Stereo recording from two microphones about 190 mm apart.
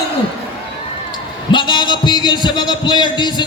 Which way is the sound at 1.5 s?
25° left (ahead or behind).